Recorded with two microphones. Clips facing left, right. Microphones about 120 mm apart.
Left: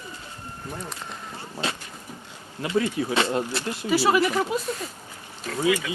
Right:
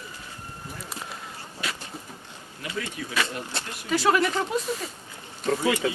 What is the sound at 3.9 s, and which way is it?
Speech, 5° left (ahead or behind).